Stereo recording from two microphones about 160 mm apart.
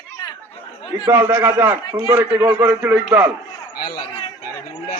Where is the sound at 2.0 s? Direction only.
25° right (ahead or behind).